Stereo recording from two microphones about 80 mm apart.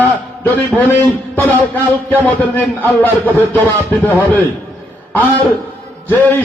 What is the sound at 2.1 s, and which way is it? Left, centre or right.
A man's voice, left.